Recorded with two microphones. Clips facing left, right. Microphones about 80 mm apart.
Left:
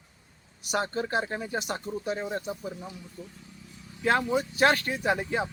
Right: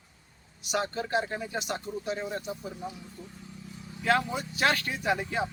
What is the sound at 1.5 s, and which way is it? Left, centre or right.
Speech, left.